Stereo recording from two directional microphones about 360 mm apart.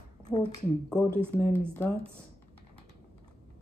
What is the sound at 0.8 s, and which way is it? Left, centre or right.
Speech, centre.